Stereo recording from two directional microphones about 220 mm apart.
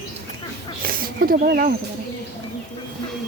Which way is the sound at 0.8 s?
40° right (ahead or behind).